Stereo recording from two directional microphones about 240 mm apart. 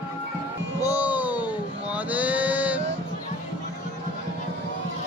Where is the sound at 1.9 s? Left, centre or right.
Centre.